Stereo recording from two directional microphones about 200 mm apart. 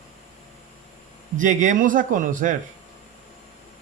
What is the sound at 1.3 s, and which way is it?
Speech, 40° right (ahead or behind).